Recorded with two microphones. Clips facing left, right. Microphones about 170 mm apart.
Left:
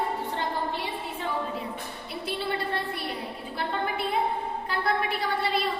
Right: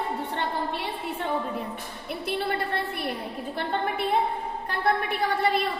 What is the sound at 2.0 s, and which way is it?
Female singing, 55° right (ahead or behind).